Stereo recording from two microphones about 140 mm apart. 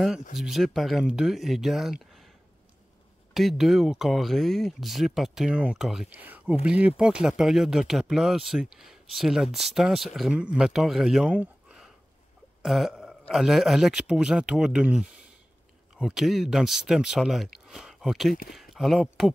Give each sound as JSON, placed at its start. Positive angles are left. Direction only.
{"t": 0.4, "sound": "speech", "side_deg": 0}
{"t": 3.3, "sound": "speech", "side_deg": 0}
{"t": 12.6, "sound": "burping", "side_deg": 0}
{"t": 13.3, "sound": "speech", "side_deg": 0}